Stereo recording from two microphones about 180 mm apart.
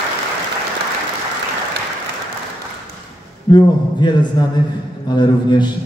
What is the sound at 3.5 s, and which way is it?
A man's voice, 25° left (ahead or behind).